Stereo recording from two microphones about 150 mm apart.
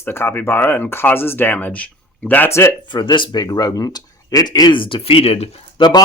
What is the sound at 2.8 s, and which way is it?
A man's voice, 30° left (ahead or behind).